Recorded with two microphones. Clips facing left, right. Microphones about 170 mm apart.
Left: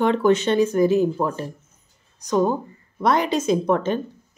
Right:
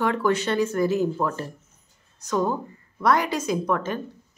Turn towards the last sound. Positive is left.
turn(degrees=25)  # may be behind; listen again after turning